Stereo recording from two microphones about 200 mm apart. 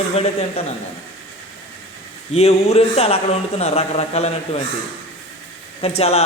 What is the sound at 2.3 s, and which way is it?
A man's voice, 30° left (ahead or behind).